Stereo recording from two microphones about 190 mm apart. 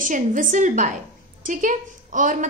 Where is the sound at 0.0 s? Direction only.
45° right (ahead or behind).